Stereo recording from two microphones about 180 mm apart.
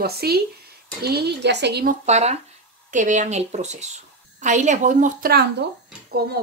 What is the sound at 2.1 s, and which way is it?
Speech, 35° right (ahead or behind).